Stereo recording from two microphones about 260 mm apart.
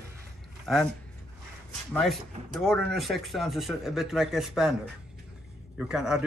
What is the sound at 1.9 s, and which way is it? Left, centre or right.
Speech, centre.